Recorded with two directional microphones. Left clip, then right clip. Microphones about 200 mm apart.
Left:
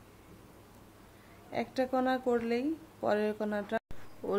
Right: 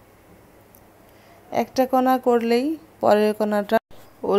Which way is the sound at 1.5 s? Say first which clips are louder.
Right 12 dB; 35° right (ahead or behind).